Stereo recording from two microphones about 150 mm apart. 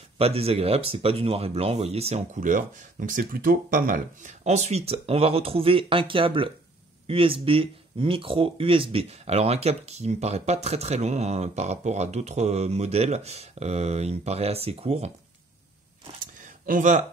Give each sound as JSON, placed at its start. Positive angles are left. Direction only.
{"t": 0.2, "sound": "speech", "side_deg": -40}
{"t": 2.4, "sound": "speech", "side_deg": -60}
{"t": 16.3, "sound": "a sound", "side_deg": -60}